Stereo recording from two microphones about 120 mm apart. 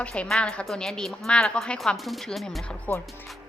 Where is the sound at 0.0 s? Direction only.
10° left (ahead or behind).